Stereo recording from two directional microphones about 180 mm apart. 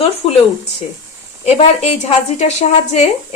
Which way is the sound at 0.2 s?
35° left (ahead or behind).